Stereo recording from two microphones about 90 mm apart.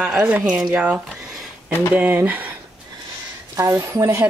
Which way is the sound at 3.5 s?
30° right (ahead or behind).